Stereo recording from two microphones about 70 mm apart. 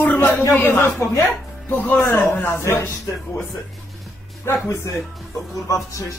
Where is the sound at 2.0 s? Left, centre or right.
Left.